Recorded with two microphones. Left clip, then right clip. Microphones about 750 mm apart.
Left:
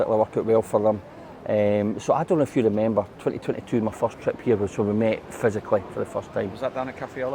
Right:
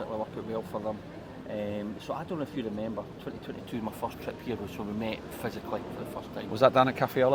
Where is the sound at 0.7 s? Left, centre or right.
Left.